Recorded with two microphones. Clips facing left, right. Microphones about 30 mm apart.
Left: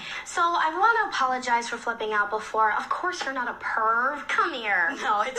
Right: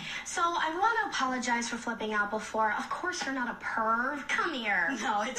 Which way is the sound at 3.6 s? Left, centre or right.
Left.